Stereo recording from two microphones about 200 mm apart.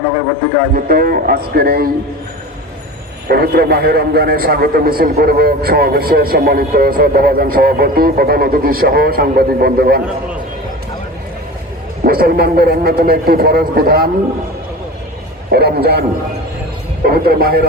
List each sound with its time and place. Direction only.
0.9 s a man's voice: 45° right (ahead or behind)
3.2 s a man's voice: 50° right (ahead or behind)
12.0 s a man's voice: 50° right (ahead or behind)
15.5 s a man's voice: 50° right (ahead or behind)